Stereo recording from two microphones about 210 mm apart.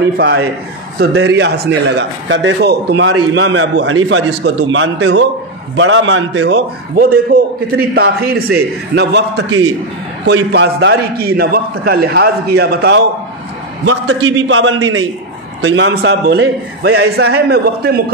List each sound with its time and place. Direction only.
0.9 s a man's voice: 55° right (ahead or behind)
13.8 s a man's voice: 65° right (ahead or behind); by 18.1 s 45° right (ahead or behind)